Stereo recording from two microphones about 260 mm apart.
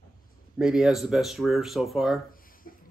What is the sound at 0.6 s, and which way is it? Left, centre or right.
Speech, centre.